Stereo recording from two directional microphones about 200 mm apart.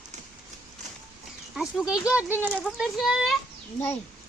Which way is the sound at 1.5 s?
5° right (ahead or behind).